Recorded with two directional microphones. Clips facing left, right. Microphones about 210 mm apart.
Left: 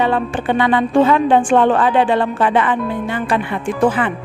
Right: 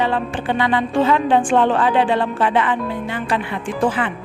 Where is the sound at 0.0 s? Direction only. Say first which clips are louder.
Left 3 dB; 55° left (ahead or behind).